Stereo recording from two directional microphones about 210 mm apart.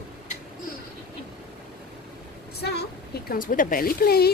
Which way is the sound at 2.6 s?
50° left (ahead or behind).